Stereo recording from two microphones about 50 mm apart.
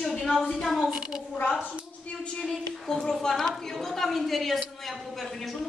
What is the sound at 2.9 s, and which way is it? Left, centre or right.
A woman's voice, centre.